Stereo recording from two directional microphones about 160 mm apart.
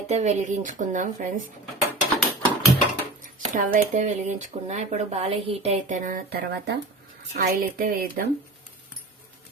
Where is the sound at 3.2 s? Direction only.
55° right (ahead or behind); by 6.7 s 75° right (ahead or behind).